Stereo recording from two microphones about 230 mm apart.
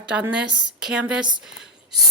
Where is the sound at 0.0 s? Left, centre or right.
Centre.